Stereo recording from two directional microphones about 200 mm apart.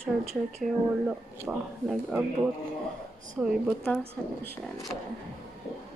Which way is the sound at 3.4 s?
Centre (ahead or behind).